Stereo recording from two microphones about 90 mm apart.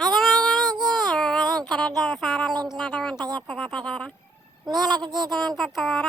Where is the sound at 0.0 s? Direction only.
Centre (ahead or behind).